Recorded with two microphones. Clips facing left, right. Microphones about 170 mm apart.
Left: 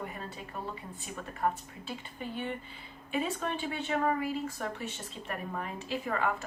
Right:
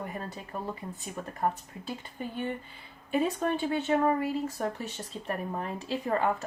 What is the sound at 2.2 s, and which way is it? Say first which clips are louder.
A woman's voice: right 3 dB; 45° right (ahead or behind).